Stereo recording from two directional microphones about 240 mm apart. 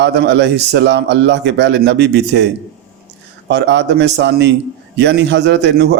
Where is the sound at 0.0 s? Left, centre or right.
Right.